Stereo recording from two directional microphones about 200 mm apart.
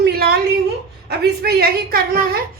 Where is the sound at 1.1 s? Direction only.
55° right (ahead or behind).